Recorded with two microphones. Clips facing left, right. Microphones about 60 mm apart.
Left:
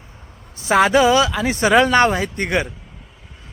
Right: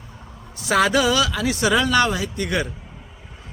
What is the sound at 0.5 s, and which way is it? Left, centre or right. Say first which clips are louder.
Speech: left 4 dB; left.